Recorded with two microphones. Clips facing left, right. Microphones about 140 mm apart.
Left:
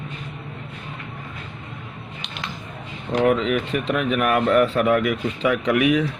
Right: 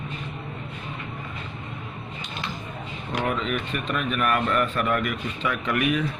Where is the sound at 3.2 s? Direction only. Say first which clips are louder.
Left 8 dB; 85° left.